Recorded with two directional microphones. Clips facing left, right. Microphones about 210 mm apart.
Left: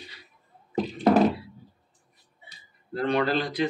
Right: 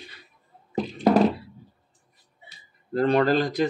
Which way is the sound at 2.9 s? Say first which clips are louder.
Right 4 dB; 40° right (ahead or behind).